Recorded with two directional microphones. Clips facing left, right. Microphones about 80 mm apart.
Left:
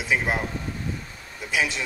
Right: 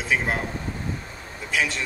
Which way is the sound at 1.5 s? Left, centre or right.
Centre.